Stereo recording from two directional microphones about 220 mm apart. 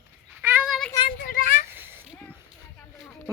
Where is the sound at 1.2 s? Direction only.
40° left (ahead or behind).